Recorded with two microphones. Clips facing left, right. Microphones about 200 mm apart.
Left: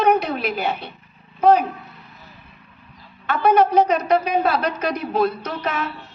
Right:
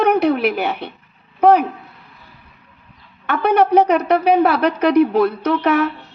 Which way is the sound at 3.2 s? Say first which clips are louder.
Right 1 dB; 60° right (ahead or behind).